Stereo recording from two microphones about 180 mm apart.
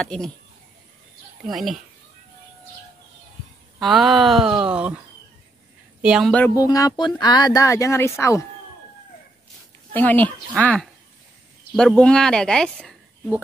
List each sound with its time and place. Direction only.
0.0 s speech: 5° left (ahead or behind)
1.4 s speech: centre (ahead or behind)
3.8 s speech: centre (ahead or behind)
6.0 s speech: 5° right (ahead or behind)
6.3 s speech: 15° left (ahead or behind)
9.9 s speech: 10° left (ahead or behind)